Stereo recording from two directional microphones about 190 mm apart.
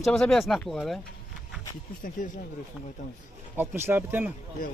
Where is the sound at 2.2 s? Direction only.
45° left (ahead or behind).